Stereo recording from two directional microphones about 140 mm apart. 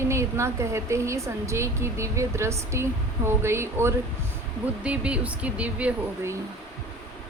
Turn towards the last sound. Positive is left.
turn(degrees=-15)  # may be behind; listen again after turning